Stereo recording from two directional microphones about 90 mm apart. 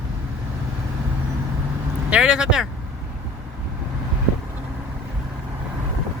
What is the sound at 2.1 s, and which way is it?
Speech, 10° right (ahead or behind).